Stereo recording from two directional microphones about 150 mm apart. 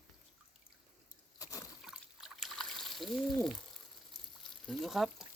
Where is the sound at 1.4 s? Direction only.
25° left (ahead or behind).